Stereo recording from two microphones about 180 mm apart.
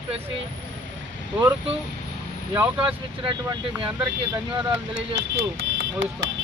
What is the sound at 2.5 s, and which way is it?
Speech, 10° right (ahead or behind).